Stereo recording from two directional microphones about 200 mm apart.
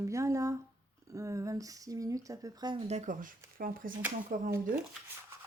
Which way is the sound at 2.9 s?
35° right (ahead or behind).